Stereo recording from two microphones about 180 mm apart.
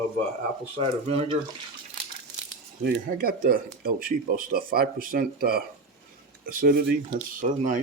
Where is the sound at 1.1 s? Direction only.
35° right (ahead or behind).